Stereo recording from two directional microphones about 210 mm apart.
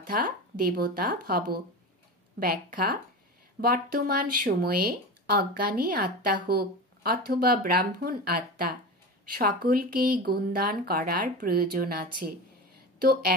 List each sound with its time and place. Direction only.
0.1 s speech: 45° right (ahead or behind)